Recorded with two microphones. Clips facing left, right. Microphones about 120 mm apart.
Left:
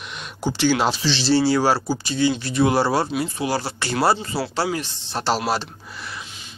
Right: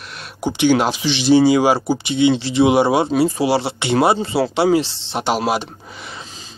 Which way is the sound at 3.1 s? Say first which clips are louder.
Right 8 dB; 35° right (ahead or behind).